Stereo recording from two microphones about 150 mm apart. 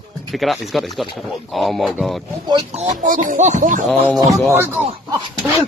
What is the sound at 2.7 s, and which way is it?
Speech, 50° right (ahead or behind).